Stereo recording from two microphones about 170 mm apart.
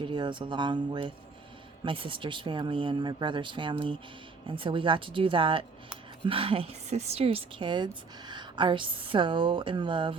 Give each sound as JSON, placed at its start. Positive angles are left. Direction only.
{"t": 0.0, "sound": "a woman's voice", "side_deg": -30}